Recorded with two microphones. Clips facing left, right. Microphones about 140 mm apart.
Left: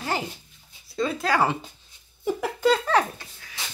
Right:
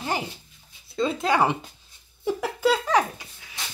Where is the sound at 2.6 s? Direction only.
10° right (ahead or behind).